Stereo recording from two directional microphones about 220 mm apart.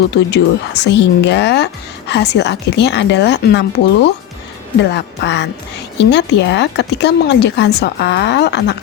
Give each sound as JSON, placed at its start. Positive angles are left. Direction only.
{"t": 0.1, "sound": "speech", "side_deg": 50}